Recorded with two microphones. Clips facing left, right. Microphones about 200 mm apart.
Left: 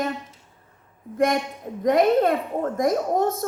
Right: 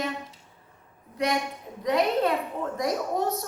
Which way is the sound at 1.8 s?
50° left (ahead or behind).